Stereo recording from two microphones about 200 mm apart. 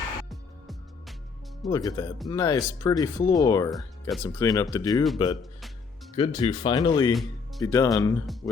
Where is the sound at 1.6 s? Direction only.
20° left (ahead or behind).